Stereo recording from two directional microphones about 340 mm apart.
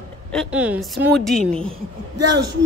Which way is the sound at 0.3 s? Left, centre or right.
Centre.